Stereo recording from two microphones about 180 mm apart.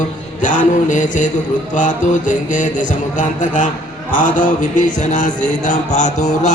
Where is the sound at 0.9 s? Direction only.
45° left (ahead or behind).